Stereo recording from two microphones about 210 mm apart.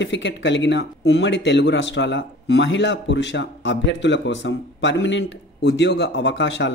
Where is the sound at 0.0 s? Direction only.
60° left (ahead or behind).